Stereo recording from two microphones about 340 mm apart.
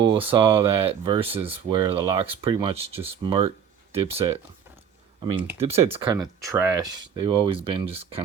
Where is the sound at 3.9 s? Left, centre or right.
Centre.